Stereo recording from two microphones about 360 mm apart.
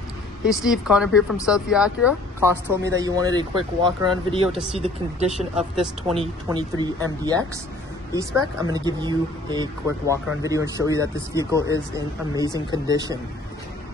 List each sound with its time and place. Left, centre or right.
0.6 s speech: centre
5.4 s speech: centre